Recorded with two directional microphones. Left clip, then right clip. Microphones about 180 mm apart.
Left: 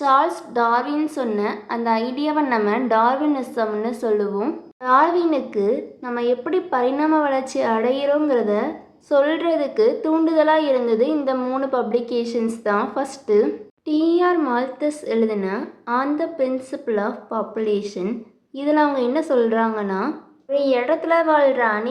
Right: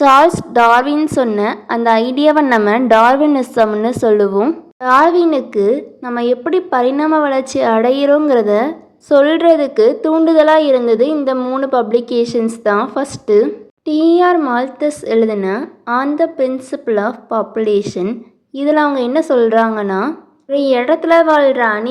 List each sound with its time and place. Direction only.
0.0 s a woman's voice: 45° right (ahead or behind)